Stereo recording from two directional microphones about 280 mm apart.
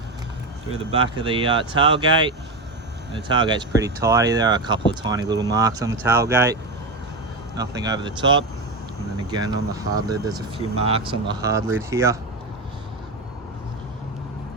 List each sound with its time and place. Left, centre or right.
0.7 s speech: centre